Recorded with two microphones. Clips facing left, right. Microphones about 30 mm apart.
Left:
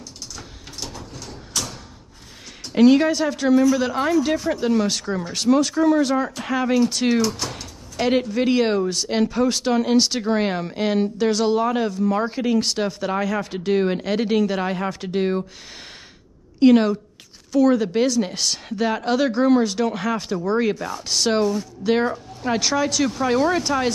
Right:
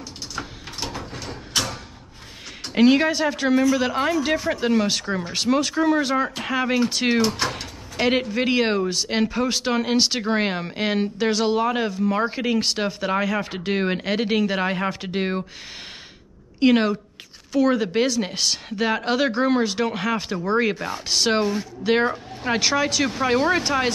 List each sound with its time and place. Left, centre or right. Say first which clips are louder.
0.4 s a sound: right 6 dB; right
2.7 s speech: left 2 dB; centre; by 7.6 s right
8.0 s speech: left 1 dB; centre
16.5 s speech: left 3 dB; centre
20.7 s speech: even; right
21.1 s speech: left 1 dB; centre